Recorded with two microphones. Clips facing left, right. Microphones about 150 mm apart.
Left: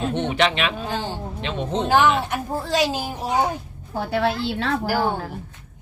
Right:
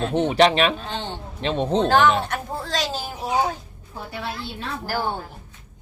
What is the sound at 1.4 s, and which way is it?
Speech, 35° right (ahead or behind).